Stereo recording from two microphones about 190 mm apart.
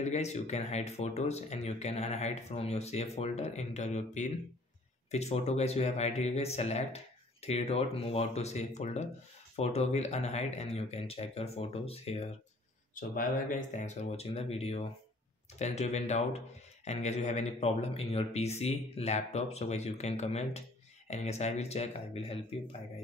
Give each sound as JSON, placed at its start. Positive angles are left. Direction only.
{"t": 0.0, "sound": "speech", "side_deg": 35}
{"t": 12.9, "sound": "speech", "side_deg": 45}